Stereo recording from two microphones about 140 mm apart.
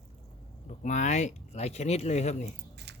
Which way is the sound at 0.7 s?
60° left (ahead or behind).